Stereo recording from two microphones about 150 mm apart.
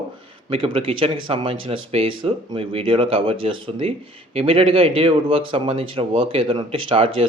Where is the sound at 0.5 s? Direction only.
35° right (ahead or behind).